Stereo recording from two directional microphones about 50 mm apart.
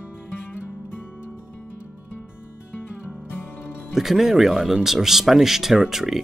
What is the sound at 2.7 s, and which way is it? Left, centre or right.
Music, left.